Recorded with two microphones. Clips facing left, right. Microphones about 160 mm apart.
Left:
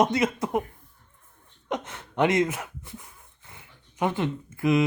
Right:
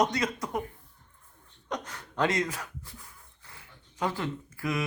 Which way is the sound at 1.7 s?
25° left (ahead or behind).